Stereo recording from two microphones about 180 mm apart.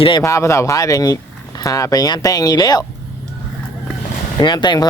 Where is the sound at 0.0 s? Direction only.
20° left (ahead or behind).